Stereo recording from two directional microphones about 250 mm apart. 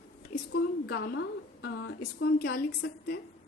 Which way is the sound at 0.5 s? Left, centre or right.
Left.